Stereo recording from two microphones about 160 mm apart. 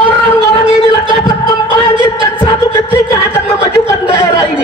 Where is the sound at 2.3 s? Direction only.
25° left (ahead or behind).